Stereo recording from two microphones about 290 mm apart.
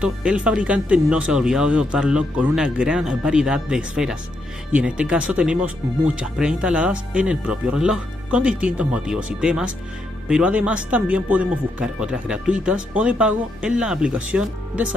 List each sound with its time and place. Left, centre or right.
0.0 s speech: centre